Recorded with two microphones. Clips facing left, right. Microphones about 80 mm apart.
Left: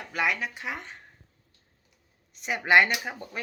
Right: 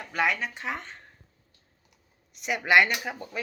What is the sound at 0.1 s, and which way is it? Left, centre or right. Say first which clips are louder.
Speech: right 1 dB; centre.